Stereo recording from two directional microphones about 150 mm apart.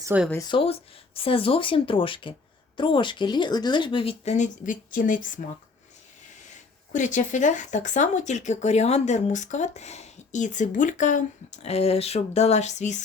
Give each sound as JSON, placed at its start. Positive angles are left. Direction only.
{"t": 0.1, "sound": "speech", "side_deg": -15}
{"t": 0.4, "sound": "speech", "side_deg": 35}
{"t": 6.9, "sound": "speech", "side_deg": 55}